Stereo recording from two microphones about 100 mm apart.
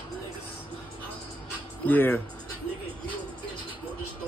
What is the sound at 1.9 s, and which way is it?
Speech, 20° left (ahead or behind).